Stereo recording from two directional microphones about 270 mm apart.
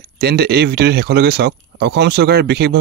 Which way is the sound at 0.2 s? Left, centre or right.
Right.